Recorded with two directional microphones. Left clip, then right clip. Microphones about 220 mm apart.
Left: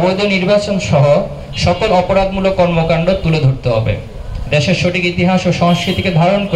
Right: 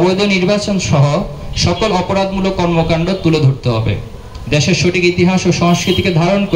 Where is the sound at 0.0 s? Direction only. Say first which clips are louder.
Right 1 dB; 50° right (ahead or behind).